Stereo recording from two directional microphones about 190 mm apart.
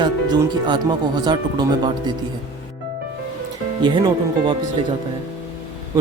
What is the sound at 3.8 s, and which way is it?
Speech, 25° right (ahead or behind).